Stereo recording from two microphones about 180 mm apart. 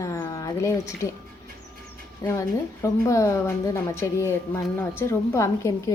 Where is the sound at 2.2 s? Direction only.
15° left (ahead or behind).